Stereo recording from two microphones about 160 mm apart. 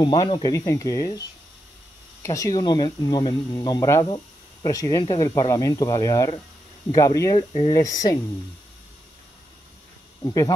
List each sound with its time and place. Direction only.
0.0 s speech: 30° left (ahead or behind)
2.2 s speech: 20° left (ahead or behind)
10.2 s speech: 25° left (ahead or behind)